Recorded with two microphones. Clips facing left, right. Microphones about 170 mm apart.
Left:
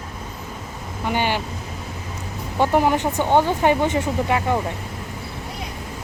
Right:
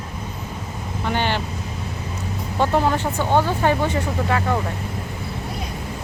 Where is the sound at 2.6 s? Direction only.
15° left (ahead or behind).